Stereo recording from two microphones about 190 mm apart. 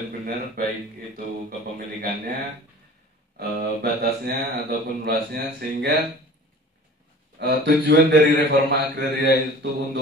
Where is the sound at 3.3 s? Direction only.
55° right (ahead or behind).